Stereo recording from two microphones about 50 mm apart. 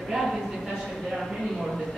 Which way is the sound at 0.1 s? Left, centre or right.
Centre.